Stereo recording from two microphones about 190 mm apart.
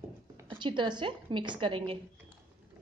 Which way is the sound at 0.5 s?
25° right (ahead or behind).